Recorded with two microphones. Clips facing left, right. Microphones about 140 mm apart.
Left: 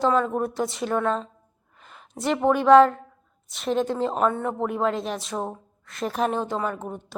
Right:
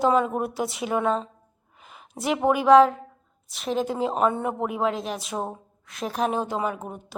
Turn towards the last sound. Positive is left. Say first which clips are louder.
# even
turn(degrees=-5)  # may be behind; listen again after turning